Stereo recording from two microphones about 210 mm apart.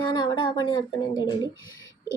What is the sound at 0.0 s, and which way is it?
Speech, 20° left (ahead or behind).